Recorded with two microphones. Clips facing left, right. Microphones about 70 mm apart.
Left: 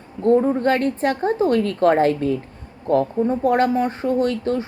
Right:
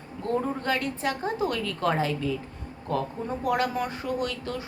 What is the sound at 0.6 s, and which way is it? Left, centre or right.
A woman's voice, left.